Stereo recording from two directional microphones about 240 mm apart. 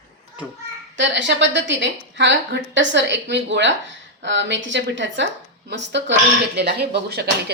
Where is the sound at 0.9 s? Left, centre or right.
Right.